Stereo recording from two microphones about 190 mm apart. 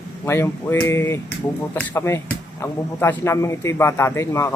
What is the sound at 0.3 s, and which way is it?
Speech, 10° left (ahead or behind).